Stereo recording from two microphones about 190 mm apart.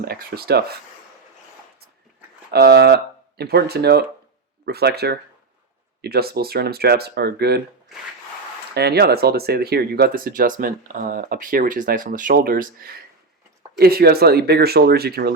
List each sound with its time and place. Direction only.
0.0 s speech: 55° right (ahead or behind)
2.5 s speech: 55° right (ahead or behind)
8.7 s speech: 55° right (ahead or behind)